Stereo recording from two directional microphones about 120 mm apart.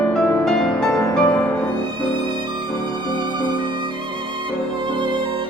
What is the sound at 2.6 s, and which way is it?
Music, 40° right (ahead or behind).